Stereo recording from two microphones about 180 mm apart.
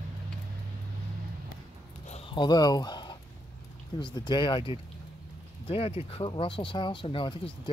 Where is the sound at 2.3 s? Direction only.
25° left (ahead or behind).